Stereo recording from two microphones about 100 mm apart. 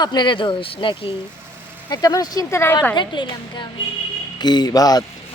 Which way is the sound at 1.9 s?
40° left (ahead or behind).